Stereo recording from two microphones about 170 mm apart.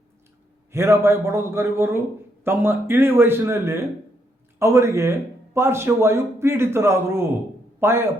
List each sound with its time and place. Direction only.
0.7 s a man's voice: 15° right (ahead or behind)